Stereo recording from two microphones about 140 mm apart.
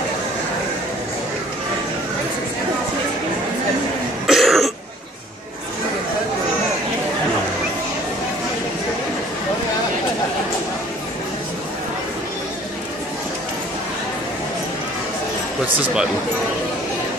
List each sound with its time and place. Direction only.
4.3 s cough: centre (ahead or behind)
15.8 s speech: 5° right (ahead or behind)